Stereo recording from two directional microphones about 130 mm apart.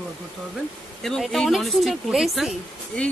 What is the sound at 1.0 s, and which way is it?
Speech, centre (ahead or behind).